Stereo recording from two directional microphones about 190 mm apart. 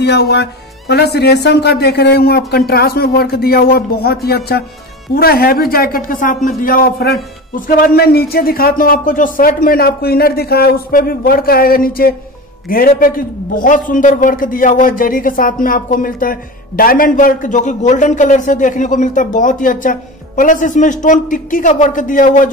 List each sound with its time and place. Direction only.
0.0 s a man's voice: 60° left (ahead or behind); by 22.5 s 45° left (ahead or behind)